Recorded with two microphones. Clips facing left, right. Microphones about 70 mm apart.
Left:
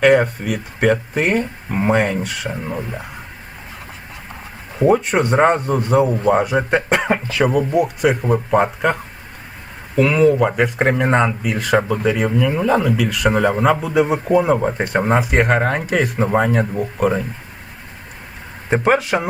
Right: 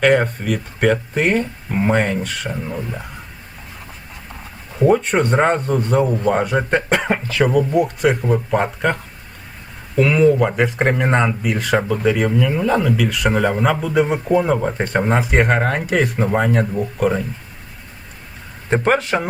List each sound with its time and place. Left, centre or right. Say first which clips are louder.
0.0 s speech: left 2 dB; centre
4.7 s speech: even; centre
10.0 s speech: even; centre
18.7 s speech: left 1 dB; centre